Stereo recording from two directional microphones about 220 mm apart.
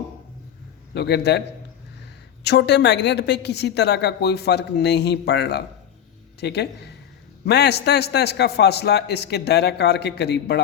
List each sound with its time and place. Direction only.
0.9 s a woman's voice: 50° left (ahead or behind)
2.4 s a woman's voice: 50° left (ahead or behind)